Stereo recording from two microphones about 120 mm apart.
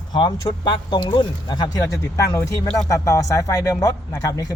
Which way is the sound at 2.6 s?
5° left (ahead or behind).